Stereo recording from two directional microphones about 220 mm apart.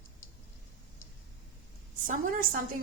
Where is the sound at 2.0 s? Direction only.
35° right (ahead or behind).